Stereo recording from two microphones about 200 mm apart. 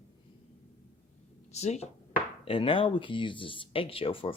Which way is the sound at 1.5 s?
35° left (ahead or behind).